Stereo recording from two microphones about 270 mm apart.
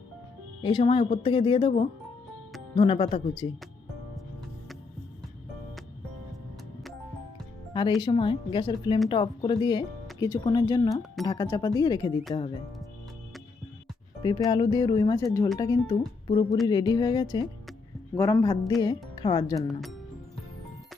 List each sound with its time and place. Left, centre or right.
0.6 s speech: centre
7.7 s music: centre
8.0 s speech: centre
14.2 s speech: centre
17.7 s music: centre
19.1 s speech: centre
19.6 s speech: centre